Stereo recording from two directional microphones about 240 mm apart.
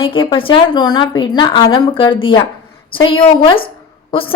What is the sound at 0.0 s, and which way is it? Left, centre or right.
Speech, left.